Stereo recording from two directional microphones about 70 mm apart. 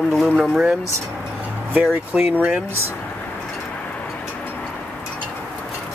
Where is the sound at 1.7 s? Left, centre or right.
Right.